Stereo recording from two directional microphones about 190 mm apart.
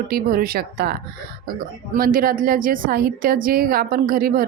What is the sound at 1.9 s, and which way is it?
A woman's voice, 50° right (ahead or behind).